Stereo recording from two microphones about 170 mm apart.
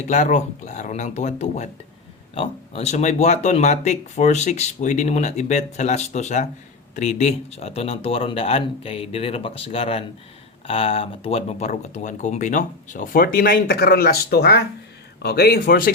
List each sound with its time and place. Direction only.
0.1 s speech: 45° left (ahead or behind); by 15.9 s 65° left (ahead or behind)